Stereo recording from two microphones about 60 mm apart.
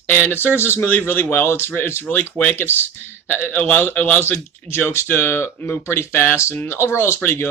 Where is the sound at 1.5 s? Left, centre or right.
Left.